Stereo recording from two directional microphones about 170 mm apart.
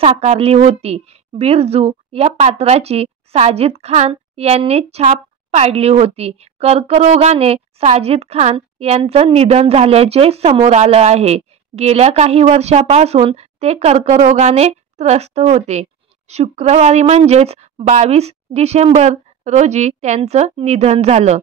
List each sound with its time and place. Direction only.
0.0 s a woman's voice: 35° right (ahead or behind)